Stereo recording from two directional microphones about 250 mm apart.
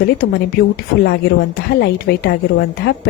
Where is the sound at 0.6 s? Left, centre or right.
Left.